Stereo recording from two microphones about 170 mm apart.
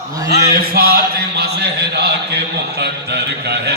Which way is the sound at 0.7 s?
65° right (ahead or behind).